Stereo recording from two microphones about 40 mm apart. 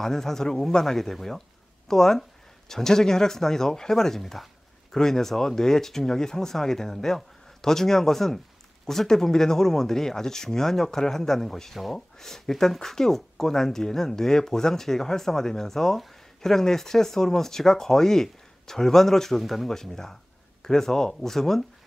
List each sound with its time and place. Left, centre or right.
0.0 s speech: centre